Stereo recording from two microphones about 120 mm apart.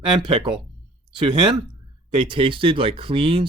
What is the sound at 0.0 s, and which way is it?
Speech, 45° right (ahead or behind).